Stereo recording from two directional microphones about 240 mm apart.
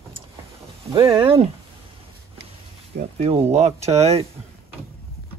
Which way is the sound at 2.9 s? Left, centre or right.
Right.